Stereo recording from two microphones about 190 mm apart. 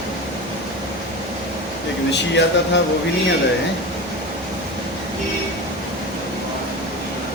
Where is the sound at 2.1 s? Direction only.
65° left (ahead or behind).